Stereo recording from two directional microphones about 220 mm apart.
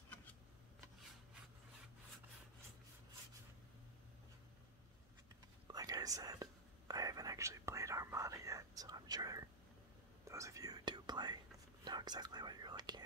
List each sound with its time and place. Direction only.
5.7 s whispering: 15° right (ahead or behind)